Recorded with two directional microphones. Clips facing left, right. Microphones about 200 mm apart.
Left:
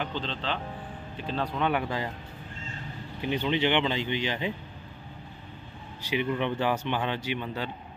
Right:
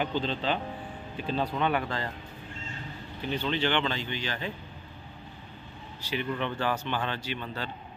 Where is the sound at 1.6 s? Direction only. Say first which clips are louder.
Left 1 dB; 10° left (ahead or behind).